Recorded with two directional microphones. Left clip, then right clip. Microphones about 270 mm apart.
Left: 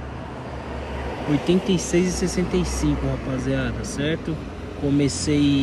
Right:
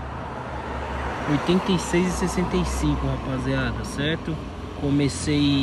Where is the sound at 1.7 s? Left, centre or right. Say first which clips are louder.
Left 1 dB; centre.